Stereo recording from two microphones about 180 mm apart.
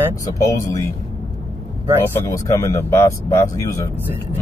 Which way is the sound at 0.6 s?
15° left (ahead or behind).